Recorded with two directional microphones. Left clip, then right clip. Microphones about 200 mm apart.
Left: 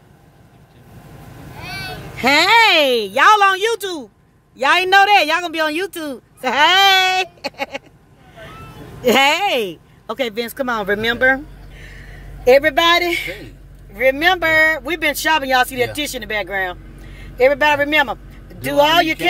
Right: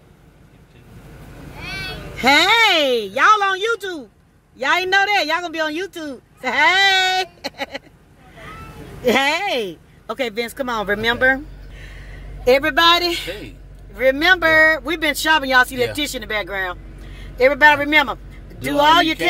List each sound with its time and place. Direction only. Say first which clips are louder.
1.6 s vehicle: even; 35° left (ahead or behind)
2.1 s a woman's voice: left 2 dB; 10° left (ahead or behind)
9.0 s speech: left 3 dB; 15° left (ahead or behind)